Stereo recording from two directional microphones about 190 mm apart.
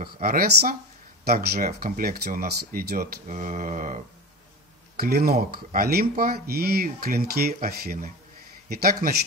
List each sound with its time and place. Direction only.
0.0 s speech: 50° right (ahead or behind)
4.9 s speech: 55° right (ahead or behind)
8.6 s speech: 50° right (ahead or behind)